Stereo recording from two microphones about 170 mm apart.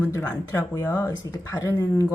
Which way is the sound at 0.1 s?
15° left (ahead or behind).